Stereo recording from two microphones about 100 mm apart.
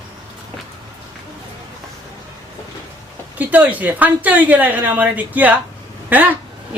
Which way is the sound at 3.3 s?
15° right (ahead or behind).